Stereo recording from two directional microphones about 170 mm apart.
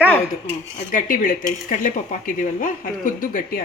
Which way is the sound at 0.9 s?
55° left (ahead or behind).